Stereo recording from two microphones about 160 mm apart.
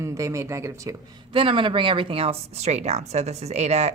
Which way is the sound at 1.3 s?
30° right (ahead or behind).